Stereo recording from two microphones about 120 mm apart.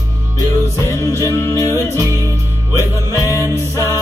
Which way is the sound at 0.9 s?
25° left (ahead or behind).